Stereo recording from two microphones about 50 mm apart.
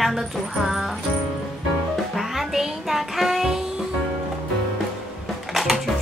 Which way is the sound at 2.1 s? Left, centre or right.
Centre.